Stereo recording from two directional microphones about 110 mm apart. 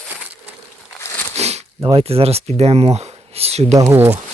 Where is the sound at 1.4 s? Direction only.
75° right (ahead or behind).